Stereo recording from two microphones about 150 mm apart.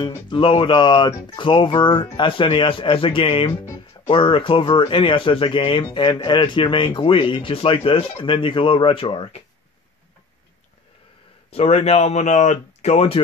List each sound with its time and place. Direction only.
0.0 s speech: 35° left (ahead or behind)
11.5 s speech: 45° left (ahead or behind)